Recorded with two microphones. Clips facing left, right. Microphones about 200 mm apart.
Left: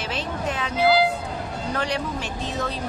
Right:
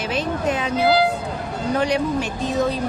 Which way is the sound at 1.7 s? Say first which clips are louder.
Right 7 dB; 15° right (ahead or behind).